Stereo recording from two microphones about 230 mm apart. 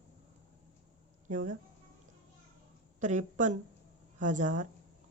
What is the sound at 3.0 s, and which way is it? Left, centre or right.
Speech, right.